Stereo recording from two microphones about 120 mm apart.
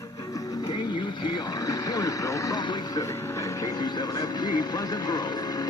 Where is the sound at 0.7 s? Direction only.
40° left (ahead or behind).